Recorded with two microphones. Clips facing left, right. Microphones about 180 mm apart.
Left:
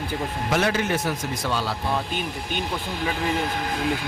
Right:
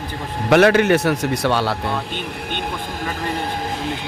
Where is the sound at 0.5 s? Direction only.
70° right (ahead or behind).